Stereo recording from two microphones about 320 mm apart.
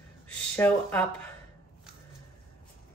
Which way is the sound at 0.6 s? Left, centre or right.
Centre.